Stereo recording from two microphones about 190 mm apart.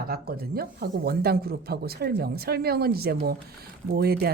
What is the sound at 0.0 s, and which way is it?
Speech, 55° right (ahead or behind).